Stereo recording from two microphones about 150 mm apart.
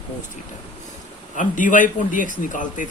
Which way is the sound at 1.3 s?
60° left (ahead or behind).